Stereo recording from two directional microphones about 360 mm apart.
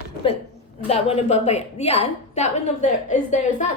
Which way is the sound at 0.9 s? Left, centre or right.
Centre.